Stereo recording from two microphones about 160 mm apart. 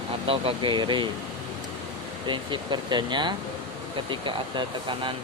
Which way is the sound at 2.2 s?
30° right (ahead or behind).